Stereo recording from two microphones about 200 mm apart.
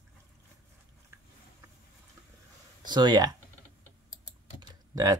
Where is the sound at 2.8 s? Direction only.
20° right (ahead or behind).